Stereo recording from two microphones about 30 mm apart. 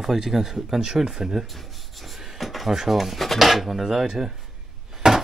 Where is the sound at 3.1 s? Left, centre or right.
Centre.